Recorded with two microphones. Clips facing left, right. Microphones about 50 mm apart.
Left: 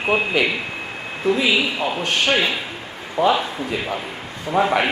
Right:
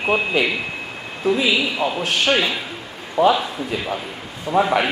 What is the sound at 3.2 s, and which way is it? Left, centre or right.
Speech, left.